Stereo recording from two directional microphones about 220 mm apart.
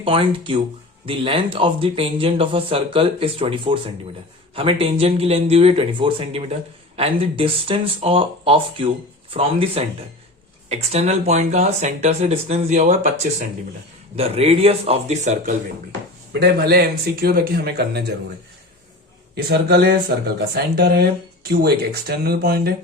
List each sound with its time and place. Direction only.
0.0 s speech: 25° right (ahead or behind)
16.3 s speech: 45° right (ahead or behind)
19.4 s speech: 50° right (ahead or behind)